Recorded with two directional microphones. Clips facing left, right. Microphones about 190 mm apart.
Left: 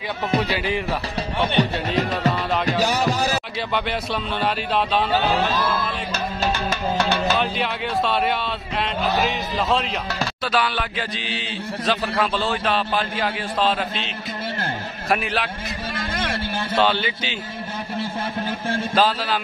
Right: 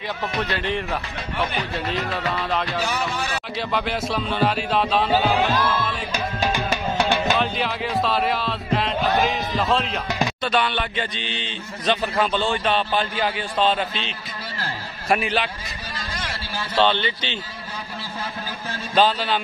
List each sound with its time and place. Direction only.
0.4 s speech: 10° left (ahead or behind)
1.4 s speech: 30° left (ahead or behind)
1.9 s a man's voice: centre (ahead or behind)
2.8 s a sound: 40° left (ahead or behind)
3.5 s a man's voice: centre (ahead or behind)
6.1 s music: 15° right (ahead or behind)
7.3 s a man's voice: centre (ahead or behind)
16.0 s vehicle: 50° left (ahead or behind)
16.8 s speech: 5° left (ahead or behind)
18.9 s a man's voice: centre (ahead or behind)